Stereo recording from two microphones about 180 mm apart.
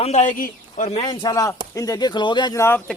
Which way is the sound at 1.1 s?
20° left (ahead or behind).